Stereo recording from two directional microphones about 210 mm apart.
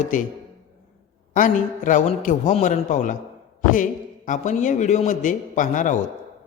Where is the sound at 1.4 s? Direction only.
40° left (ahead or behind).